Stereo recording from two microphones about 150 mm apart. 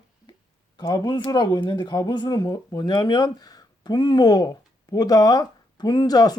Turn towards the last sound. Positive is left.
turn(degrees=25)  # may be behind; listen again after turning